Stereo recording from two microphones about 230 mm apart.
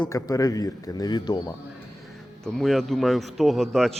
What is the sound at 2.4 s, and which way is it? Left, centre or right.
A man's voice, centre.